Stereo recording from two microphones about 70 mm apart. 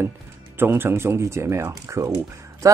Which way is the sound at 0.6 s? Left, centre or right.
Right.